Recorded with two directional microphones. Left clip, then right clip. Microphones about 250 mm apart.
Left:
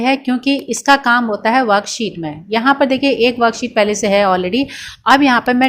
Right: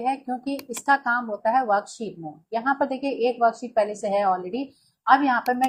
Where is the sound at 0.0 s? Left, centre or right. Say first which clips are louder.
Left 10 dB; left.